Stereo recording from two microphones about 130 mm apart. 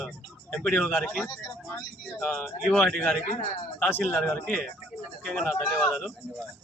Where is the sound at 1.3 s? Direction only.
25° left (ahead or behind).